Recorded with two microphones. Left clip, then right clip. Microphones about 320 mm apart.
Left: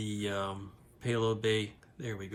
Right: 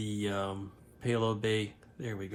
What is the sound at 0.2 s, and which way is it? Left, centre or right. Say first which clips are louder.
Speech: right 1 dB; centre.